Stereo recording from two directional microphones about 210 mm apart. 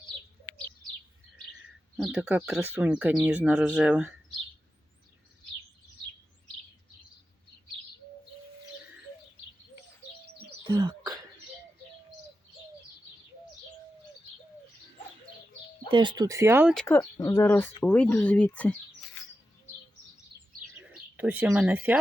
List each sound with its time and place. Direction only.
2.0 s speech: 5° right (ahead or behind)
10.7 s a sound: 20° right (ahead or behind)
15.9 s speech: 20° right (ahead or behind)
16.7 s speech: 10° left (ahead or behind)
20.3 s bird: 50° right (ahead or behind)
20.7 s speech: 5° right (ahead or behind)